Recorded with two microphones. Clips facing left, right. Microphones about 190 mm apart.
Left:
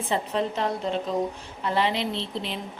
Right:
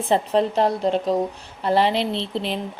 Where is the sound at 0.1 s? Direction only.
35° right (ahead or behind).